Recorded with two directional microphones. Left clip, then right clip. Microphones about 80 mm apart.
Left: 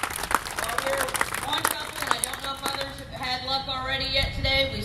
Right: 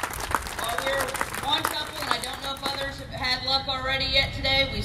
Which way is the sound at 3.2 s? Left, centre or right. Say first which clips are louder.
Right 3 dB; right.